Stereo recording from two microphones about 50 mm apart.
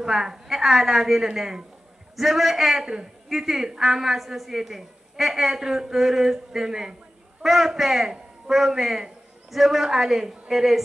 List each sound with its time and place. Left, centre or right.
0.0 s a woman's voice: centre